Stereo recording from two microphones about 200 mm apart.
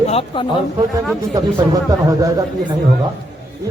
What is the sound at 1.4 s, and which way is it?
Speech, 20° right (ahead or behind).